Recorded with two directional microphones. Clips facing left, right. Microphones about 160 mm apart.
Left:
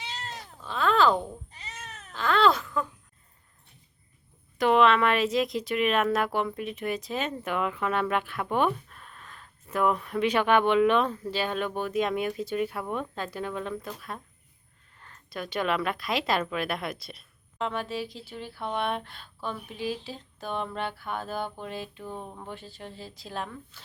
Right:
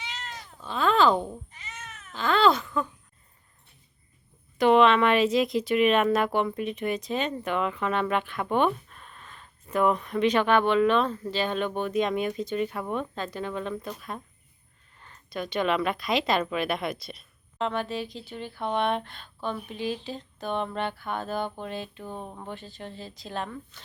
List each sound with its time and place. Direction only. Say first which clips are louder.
0.0 s cat: left 1 dB; 35° left (ahead or behind)
0.6 s a sound: right 1 dB; centre (ahead or behind)
1.5 s cat: even; 35° left (ahead or behind)
2.1 s baby cry: right 1 dB; centre (ahead or behind)
4.5 s speech: right 2 dB; centre (ahead or behind)
22.0 s speech: right 1 dB; 15° right (ahead or behind)
22.4 s speech: right 2 dB; 10° left (ahead or behind)